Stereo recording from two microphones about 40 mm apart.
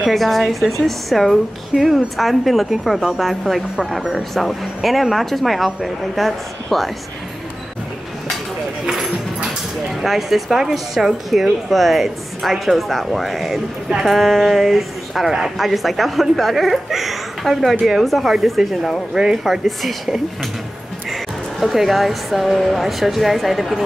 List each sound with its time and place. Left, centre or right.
0.1 s speech: centre
8.8 s speech: centre
21.1 s speech: centre